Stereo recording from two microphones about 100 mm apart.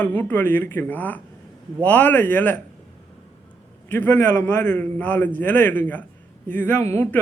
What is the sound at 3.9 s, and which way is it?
Speech, 20° left (ahead or behind).